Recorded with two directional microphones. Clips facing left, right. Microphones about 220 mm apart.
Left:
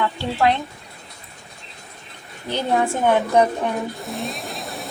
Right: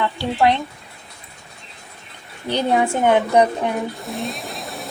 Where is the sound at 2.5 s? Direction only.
15° right (ahead or behind).